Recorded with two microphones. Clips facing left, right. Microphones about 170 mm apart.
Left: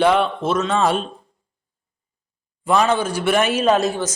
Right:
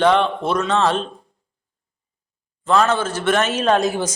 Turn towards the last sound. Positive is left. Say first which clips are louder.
# left 1 dB
turn(degrees=5)  # may be behind; listen again after turning